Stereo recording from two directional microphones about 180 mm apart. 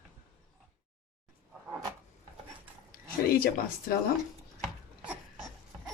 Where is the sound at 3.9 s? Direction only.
55° left (ahead or behind).